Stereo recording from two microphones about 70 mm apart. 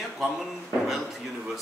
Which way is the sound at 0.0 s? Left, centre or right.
Centre.